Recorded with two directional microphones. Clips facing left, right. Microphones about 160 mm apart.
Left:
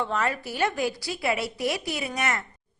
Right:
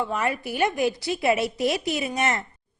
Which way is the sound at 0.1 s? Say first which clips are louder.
Right 1 dB; 10° right (ahead or behind).